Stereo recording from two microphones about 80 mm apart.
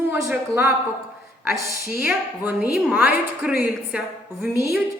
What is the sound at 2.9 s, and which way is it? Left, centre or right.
A woman's voice, centre.